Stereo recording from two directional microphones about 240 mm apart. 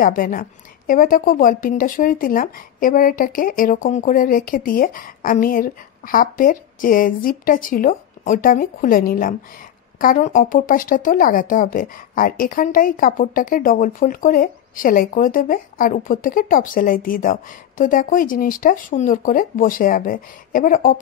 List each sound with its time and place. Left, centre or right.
0.0 s speech: left